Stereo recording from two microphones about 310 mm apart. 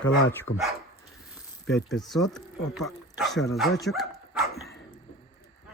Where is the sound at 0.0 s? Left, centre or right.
Left.